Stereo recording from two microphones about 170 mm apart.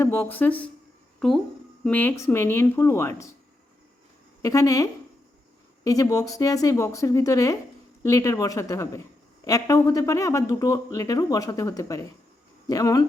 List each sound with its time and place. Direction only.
0.0 s speech: 10° left (ahead or behind)
1.8 s speech: 10° left (ahead or behind)
4.4 s speech: 20° left (ahead or behind)